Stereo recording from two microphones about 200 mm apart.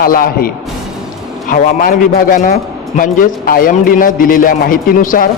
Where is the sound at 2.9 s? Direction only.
40° left (ahead or behind).